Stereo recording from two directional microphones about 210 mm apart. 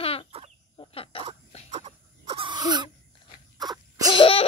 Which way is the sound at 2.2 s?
20° right (ahead or behind).